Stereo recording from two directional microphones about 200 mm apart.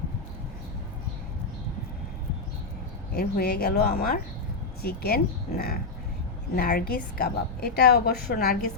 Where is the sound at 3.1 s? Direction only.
50° left (ahead or behind).